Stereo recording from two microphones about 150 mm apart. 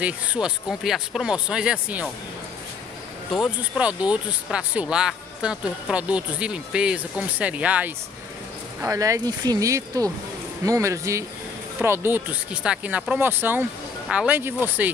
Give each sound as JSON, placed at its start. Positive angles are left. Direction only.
{"t": 0.0, "sound": "speech", "side_deg": -5}
{"t": 3.3, "sound": "speech", "side_deg": -5}
{"t": 8.8, "sound": "speech", "side_deg": -20}